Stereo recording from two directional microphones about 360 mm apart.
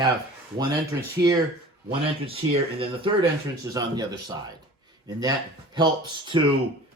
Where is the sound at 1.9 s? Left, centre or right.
Centre.